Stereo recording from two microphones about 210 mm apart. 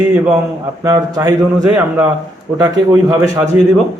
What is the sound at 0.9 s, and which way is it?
A man's voice, 15° right (ahead or behind).